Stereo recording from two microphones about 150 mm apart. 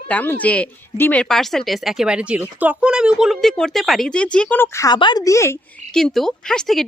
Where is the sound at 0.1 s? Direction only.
10° left (ahead or behind).